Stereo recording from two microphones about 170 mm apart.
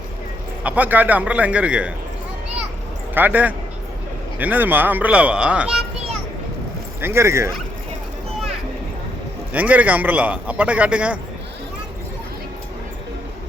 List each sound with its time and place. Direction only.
0.6 s a man's voice: 10° right (ahead or behind)
3.2 s a man's voice: 10° right (ahead or behind)
7.0 s a man's voice: 15° right (ahead or behind)
9.5 s a man's voice: 10° right (ahead or behind)